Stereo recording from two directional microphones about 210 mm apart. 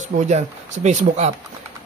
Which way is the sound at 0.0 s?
35° right (ahead or behind).